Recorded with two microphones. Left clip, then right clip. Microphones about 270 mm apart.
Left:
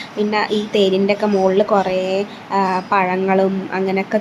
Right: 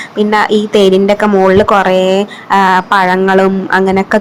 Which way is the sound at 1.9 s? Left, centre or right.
Right.